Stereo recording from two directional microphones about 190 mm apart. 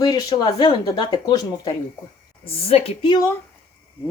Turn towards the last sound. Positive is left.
turn(degrees=25)  # may be behind; listen again after turning